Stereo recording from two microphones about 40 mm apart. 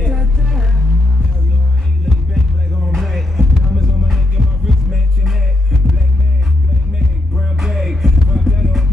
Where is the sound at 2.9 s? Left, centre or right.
Centre.